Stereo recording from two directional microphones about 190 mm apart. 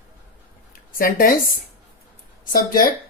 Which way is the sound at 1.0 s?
50° left (ahead or behind).